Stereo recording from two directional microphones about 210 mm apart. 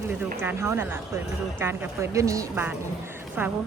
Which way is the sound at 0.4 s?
10° right (ahead or behind).